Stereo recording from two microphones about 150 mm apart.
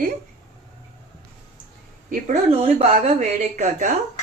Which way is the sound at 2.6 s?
45° right (ahead or behind).